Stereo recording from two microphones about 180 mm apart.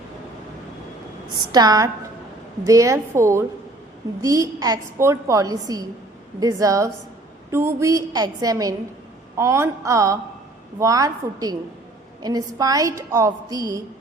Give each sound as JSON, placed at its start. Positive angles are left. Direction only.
{"t": 1.4, "sound": "a woman's voice", "side_deg": -20}